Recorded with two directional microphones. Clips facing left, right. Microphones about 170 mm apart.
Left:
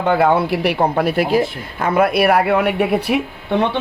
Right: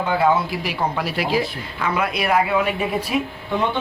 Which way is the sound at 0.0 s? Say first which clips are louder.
Left 4 dB; 65° left (ahead or behind).